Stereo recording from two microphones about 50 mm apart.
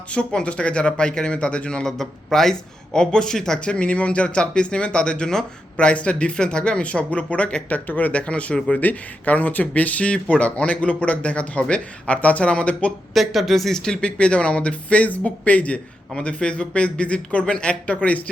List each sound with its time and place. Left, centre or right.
0.1 s speech: centre
1.9 s speech: centre
8.7 s speech: left
13.1 s speech: centre; by 18.3 s left